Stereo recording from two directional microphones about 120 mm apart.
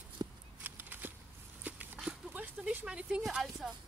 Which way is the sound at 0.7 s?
15° right (ahead or behind).